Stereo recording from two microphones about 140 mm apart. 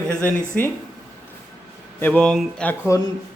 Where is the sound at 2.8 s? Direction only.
20° left (ahead or behind).